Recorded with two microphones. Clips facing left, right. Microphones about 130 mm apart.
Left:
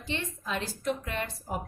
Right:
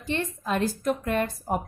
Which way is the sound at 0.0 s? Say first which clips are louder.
Right 6 dB; 50° right (ahead or behind).